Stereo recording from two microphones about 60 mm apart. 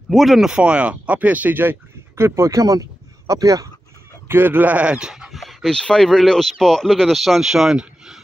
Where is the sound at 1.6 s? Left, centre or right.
Right.